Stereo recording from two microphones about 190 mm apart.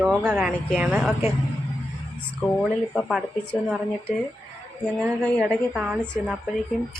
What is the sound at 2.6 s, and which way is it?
Speech, centre (ahead or behind).